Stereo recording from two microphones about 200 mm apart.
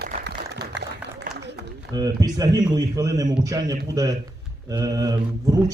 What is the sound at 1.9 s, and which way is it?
A man's voice, 20° right (ahead or behind).